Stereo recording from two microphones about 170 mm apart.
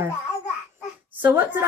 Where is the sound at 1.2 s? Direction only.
10° right (ahead or behind).